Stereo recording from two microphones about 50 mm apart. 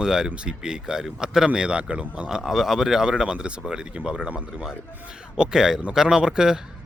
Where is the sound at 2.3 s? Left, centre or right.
Centre.